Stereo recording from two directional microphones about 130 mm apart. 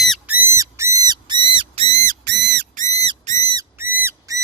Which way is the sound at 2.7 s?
65° right (ahead or behind).